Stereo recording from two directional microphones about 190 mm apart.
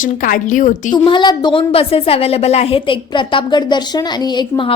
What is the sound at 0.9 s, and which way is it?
A woman's voice, 25° left (ahead or behind).